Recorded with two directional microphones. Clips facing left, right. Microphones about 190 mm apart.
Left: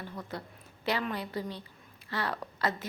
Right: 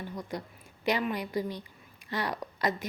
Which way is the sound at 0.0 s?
15° right (ahead or behind).